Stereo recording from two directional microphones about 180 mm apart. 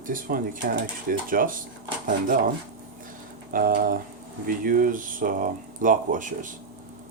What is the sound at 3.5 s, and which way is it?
Speech, 50° right (ahead or behind).